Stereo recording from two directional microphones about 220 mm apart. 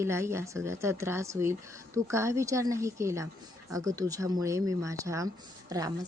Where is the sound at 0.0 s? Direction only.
10° right (ahead or behind).